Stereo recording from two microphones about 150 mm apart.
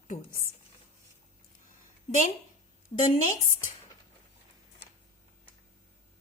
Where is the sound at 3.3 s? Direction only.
60° left (ahead or behind).